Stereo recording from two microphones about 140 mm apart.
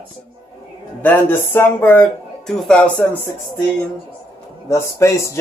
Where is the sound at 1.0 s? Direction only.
15° left (ahead or behind).